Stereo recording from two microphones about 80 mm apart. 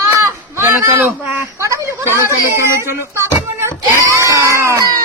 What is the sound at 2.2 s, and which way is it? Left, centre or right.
Speech, right.